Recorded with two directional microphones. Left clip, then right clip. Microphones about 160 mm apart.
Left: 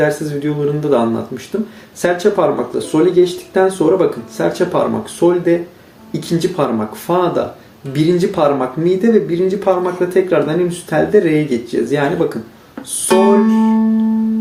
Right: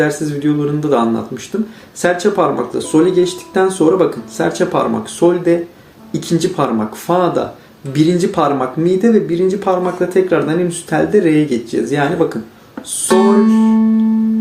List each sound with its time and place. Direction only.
0.0 s speech: 25° right (ahead or behind)